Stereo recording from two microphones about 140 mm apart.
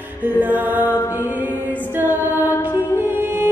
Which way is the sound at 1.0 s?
20° left (ahead or behind).